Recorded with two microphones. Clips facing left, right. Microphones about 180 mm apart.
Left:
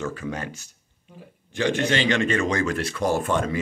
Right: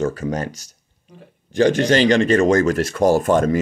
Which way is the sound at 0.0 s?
40° right (ahead or behind).